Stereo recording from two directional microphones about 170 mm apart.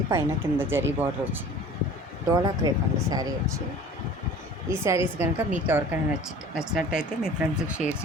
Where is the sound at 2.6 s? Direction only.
20° right (ahead or behind).